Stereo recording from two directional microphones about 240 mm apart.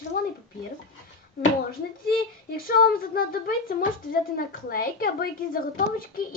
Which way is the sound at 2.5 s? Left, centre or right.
Left.